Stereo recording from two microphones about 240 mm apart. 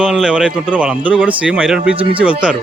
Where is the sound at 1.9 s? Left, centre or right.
Right.